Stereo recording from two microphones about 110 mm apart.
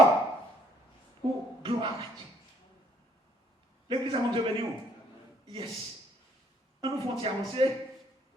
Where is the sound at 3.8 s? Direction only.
50° right (ahead or behind).